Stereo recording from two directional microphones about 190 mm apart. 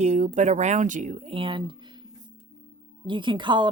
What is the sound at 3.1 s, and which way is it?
Speech, 25° right (ahead or behind).